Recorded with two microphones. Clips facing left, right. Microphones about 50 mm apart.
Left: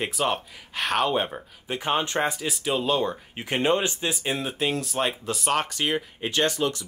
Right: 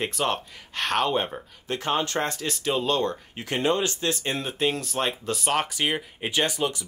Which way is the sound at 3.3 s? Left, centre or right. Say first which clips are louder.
Left 2 dB; left.